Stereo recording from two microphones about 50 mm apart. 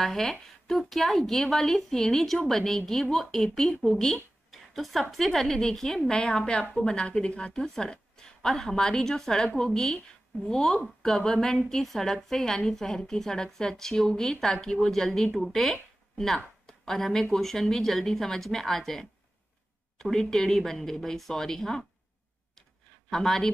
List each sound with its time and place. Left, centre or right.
0.0 s a woman's voice: centre
6.1 s a woman's voice: centre
22.6 s a sound: centre